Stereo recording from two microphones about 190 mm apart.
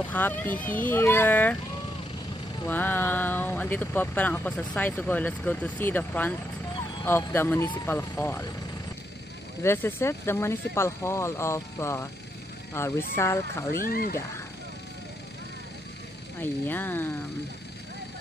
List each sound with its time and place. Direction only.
0.1 s speech: 10° left (ahead or behind)
2.6 s speech: 10° left (ahead or behind)
9.6 s speech: 10° left (ahead or behind)
13.7 s speech: 50° left (ahead or behind)
16.3 s speech: 10° left (ahead or behind)